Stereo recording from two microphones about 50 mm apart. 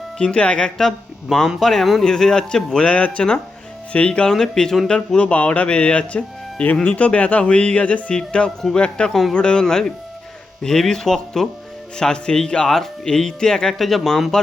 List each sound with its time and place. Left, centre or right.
0.2 s speech: left
0.8 s a man's voice: centre
2.9 s speech: left
4.4 s speech: centre
4.9 s speech: left; by 14.4 s centre